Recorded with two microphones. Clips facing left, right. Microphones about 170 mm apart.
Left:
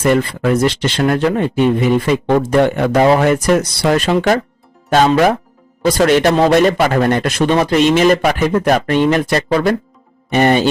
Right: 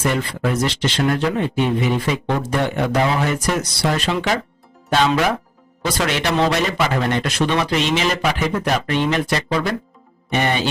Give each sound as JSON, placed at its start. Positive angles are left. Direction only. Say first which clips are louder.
{"t": 0.0, "sound": "a man's voice", "louder": "left 7 dB", "side_deg": 50}